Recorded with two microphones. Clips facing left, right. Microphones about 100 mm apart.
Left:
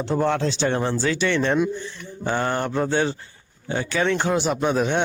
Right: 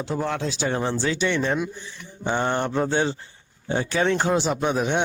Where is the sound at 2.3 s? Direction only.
20° right (ahead or behind).